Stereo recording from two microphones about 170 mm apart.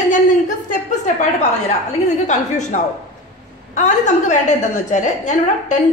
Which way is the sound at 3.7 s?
45° left (ahead or behind).